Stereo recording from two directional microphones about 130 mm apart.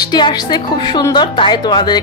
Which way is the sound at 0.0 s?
35° left (ahead or behind).